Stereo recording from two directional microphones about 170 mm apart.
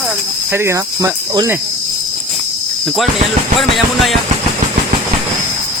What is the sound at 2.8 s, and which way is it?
Speech, centre (ahead or behind).